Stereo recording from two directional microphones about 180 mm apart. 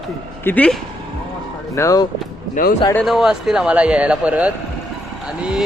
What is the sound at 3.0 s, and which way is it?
A man's voice, centre (ahead or behind).